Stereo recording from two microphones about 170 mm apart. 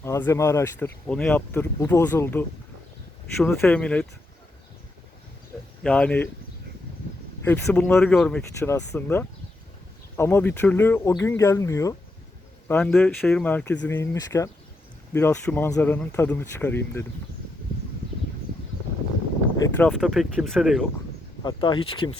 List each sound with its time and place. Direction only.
0.0 s speech: 15° left (ahead or behind)
1.0 s speech: 5° left (ahead or behind)
5.8 s speech: 5° left (ahead or behind)
7.4 s speech: 10° left (ahead or behind)
8.4 s speech: 15° left (ahead or behind)
12.6 s speech: 5° left (ahead or behind)
19.6 s speech: 15° left (ahead or behind)
19.9 s speech: centre (ahead or behind)
21.4 s speech: 25° left (ahead or behind)